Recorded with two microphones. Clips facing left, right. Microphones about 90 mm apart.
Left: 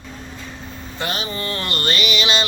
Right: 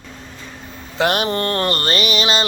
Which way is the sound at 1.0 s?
70° right (ahead or behind).